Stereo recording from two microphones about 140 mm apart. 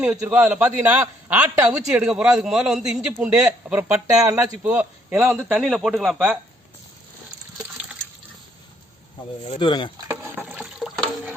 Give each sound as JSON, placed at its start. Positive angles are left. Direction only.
{"t": 0.0, "sound": "a man's voice", "side_deg": -10}
{"t": 5.5, "sound": "a man's voice", "side_deg": 0}
{"t": 9.6, "sound": "chopping", "side_deg": 35}
{"t": 10.4, "sound": "water", "side_deg": -5}